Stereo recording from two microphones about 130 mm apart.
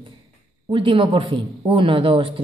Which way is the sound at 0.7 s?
40° right (ahead or behind).